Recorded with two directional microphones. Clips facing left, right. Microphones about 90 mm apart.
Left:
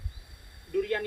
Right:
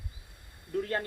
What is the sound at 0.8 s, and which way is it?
Speech, 35° right (ahead or behind).